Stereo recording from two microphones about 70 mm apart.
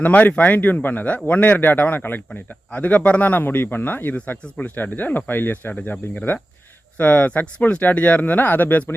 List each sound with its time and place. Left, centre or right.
0.0 s speech: left